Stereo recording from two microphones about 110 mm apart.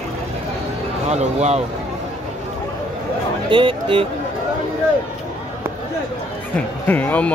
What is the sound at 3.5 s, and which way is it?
Speech, 50° right (ahead or behind).